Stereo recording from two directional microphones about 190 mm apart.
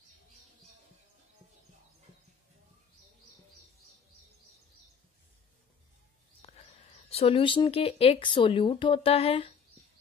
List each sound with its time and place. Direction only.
6.4 s speech: 35° left (ahead or behind)